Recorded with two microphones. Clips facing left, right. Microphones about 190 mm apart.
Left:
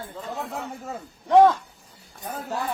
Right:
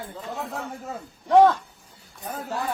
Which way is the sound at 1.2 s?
Centre (ahead or behind).